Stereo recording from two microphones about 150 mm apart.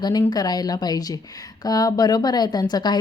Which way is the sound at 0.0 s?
25° left (ahead or behind).